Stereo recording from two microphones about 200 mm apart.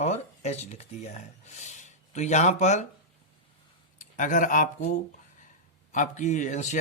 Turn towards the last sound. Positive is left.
turn(degrees=35)  # may be behind; listen again after turning